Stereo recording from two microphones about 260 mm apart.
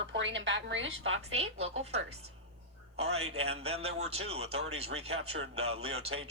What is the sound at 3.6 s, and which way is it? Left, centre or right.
Speech, right.